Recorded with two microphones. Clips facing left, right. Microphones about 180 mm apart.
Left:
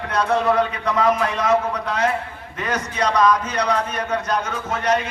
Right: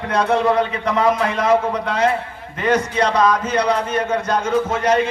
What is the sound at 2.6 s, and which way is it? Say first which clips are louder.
A man's voice: right 5 dB; 30° right (ahead or behind).